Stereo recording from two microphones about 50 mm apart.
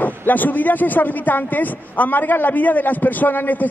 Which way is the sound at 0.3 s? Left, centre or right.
Left.